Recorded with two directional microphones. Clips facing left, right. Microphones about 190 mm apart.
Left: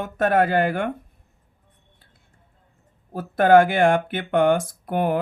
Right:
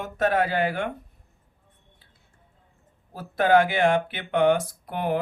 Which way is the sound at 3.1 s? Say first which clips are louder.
Left 5 dB; 50° left (ahead or behind).